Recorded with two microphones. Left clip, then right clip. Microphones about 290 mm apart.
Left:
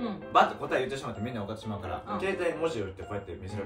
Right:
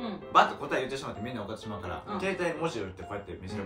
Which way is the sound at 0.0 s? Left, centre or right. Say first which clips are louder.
Even; centre.